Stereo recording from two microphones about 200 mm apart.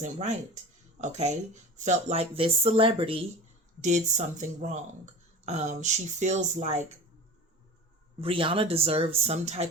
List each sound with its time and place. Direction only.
0.0 s speech: 35° right (ahead or behind)
8.2 s speech: 25° right (ahead or behind)